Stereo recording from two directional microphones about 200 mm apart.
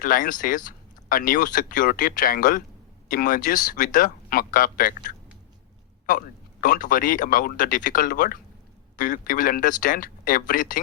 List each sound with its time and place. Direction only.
0.0 s speech: 45° left (ahead or behind)
6.1 s speech: 45° left (ahead or behind)